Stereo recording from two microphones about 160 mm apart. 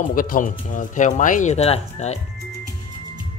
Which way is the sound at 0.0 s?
60° left (ahead or behind).